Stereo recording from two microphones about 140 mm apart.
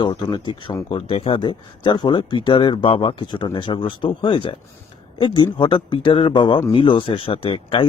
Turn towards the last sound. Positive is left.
turn(degrees=40)  # may be behind; listen again after turning